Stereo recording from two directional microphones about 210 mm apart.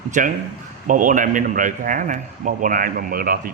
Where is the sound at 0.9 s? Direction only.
40° right (ahead or behind).